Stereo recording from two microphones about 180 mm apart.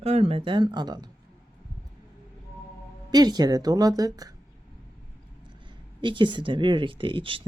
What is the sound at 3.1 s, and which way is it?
Speech, 25° right (ahead or behind).